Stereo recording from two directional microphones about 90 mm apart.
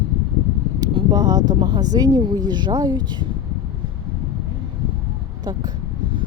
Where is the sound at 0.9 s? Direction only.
70° right (ahead or behind).